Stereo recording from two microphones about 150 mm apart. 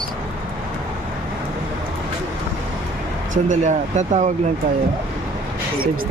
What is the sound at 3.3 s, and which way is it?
Speech, 55° right (ahead or behind).